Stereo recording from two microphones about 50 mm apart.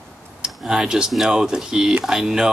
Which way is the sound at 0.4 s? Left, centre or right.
Centre.